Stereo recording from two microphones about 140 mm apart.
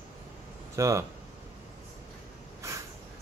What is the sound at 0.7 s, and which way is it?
Speech, 20° right (ahead or behind).